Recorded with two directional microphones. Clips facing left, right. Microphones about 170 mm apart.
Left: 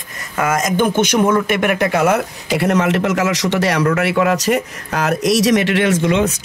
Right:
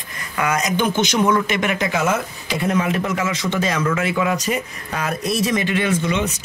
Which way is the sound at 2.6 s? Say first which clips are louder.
Left 4 dB; 80° left.